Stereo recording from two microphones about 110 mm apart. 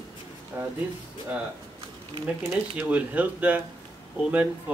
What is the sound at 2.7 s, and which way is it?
Speech, 10° right (ahead or behind).